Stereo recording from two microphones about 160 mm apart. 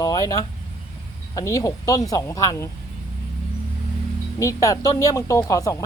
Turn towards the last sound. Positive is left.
turn(degrees=20)  # may be behind; listen again after turning